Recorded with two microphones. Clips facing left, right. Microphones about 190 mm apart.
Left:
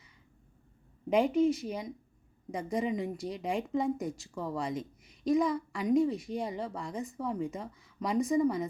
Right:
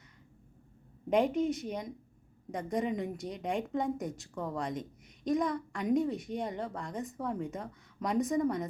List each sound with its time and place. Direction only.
1.1 s a woman's voice: centre (ahead or behind)